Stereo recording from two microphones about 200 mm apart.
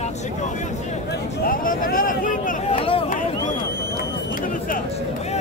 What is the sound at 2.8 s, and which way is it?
Vehicle, 30° left (ahead or behind).